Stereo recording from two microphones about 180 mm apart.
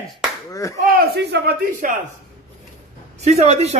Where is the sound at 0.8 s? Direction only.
65° right (ahead or behind).